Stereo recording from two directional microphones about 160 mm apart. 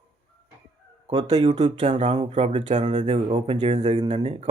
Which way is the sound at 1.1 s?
40° right (ahead or behind).